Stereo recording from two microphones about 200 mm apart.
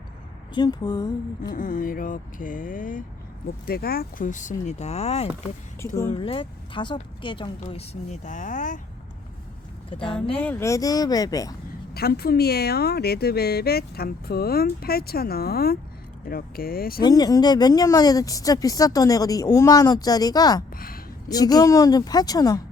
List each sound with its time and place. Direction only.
0.5 s speech: 20° left (ahead or behind)
1.5 s speech: 40° left (ahead or behind)
9.9 s speech: 25° left (ahead or behind)
10.3 s speech: 10° left (ahead or behind)
11.9 s speech: 50° left (ahead or behind)
17.0 s speech: 20° left (ahead or behind)
20.7 s a sound: 45° left (ahead or behind)
21.2 s speech: 20° left (ahead or behind)